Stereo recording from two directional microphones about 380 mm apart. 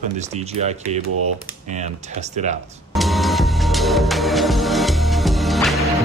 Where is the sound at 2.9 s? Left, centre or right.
Centre.